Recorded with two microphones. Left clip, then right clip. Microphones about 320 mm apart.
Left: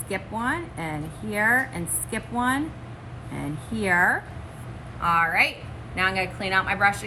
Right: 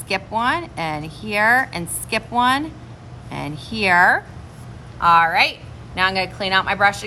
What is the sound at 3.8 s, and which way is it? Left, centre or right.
Speech, right.